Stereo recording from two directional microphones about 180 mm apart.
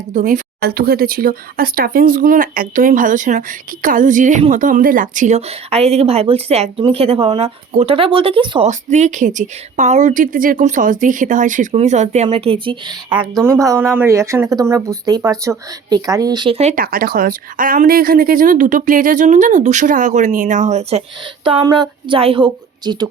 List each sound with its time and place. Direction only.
0.1 s speech: 45° right (ahead or behind); by 13.0 s 25° right (ahead or behind)
13.6 s speech: 15° right (ahead or behind)
16.6 s speech: 40° right (ahead or behind)
16.8 s speech: 55° right (ahead or behind); by 21.0 s 40° right (ahead or behind)
21.4 s a woman's voice: 25° right (ahead or behind)